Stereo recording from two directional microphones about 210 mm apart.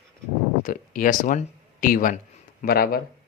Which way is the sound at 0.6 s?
40° left (ahead or behind).